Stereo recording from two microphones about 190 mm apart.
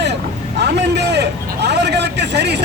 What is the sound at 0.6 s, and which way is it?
Vehicle, 60° right (ahead or behind).